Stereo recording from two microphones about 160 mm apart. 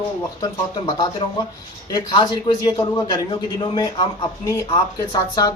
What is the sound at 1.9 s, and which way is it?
Speech, 25° left (ahead or behind).